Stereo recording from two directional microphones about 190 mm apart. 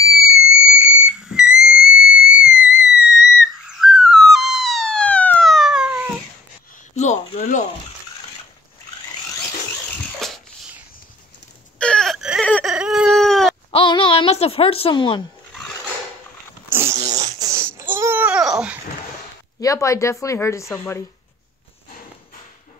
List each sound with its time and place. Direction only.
0.1 s whistle: centre (ahead or behind)
7.3 s a sound: 40° left (ahead or behind)
10.1 s a sound: centre (ahead or behind)
11.8 s wail: 5° left (ahead or behind)
12.4 s whimper: 5° left (ahead or behind)
12.7 s baby cry: 5° right (ahead or behind)
13.7 s a sound: 25° left (ahead or behind)
16.6 s dog: 15° right (ahead or behind)
17.4 s babbling: 20° right (ahead or behind)
17.8 s baby cry: 10° right (ahead or behind)
19.6 s speech: 15° left (ahead or behind)